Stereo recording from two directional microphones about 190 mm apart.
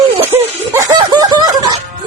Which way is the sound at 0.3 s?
15° right (ahead or behind).